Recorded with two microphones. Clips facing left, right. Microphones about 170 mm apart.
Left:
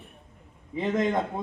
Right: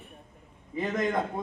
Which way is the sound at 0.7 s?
25° left (ahead or behind).